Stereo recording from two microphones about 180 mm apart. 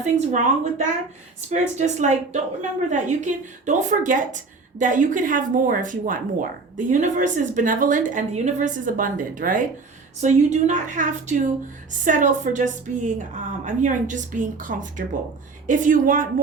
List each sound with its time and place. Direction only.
0.0 s a woman's voice: 45° right (ahead or behind)